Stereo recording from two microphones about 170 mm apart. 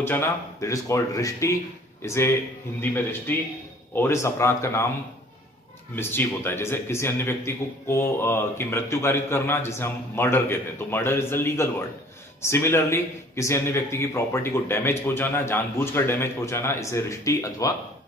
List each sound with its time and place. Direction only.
0.0 s a man's voice: 15° left (ahead or behind)
5.9 s a man's voice: 15° left (ahead or behind)